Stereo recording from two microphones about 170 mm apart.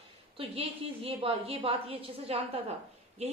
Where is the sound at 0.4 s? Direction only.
35° right (ahead or behind).